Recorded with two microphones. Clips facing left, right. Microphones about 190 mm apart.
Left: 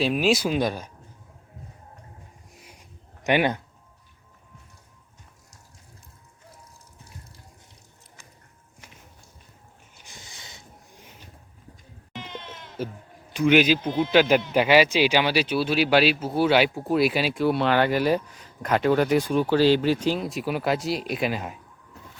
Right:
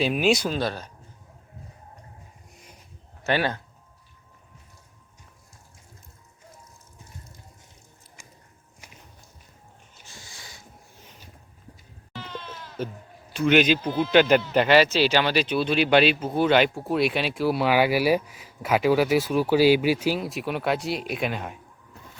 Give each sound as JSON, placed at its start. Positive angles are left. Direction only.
{"t": 0.0, "sound": "speech", "side_deg": 0}
{"t": 0.5, "sound": "a man's voice", "side_deg": 15}
{"t": 3.2, "sound": "a man's voice", "side_deg": 15}
{"t": 10.0, "sound": "boat", "side_deg": 20}
{"t": 12.1, "sound": "sheep", "side_deg": 20}
{"t": 13.3, "sound": "a man's voice", "side_deg": 10}